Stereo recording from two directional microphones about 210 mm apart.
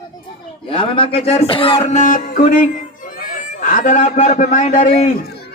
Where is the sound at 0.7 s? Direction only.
25° left (ahead or behind).